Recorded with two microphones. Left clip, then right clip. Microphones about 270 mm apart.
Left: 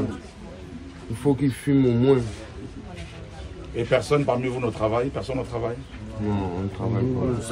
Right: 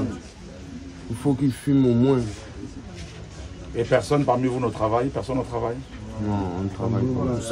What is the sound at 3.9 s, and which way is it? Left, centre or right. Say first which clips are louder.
Speech: right 1 dB; right.